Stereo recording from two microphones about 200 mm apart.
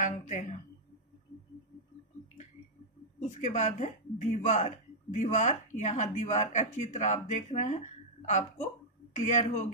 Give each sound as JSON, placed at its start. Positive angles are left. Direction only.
{"t": 0.0, "sound": "speech", "side_deg": 35}
{"t": 3.2, "sound": "a man's voice", "side_deg": 35}